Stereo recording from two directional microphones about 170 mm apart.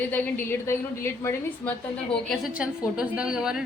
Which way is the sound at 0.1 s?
10° left (ahead or behind).